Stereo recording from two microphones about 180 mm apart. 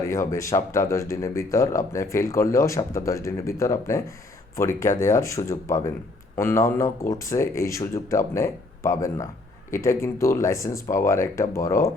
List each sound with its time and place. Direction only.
0.1 s speech: 15° left (ahead or behind)